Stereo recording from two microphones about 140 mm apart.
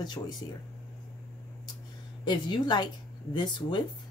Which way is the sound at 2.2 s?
30° left (ahead or behind).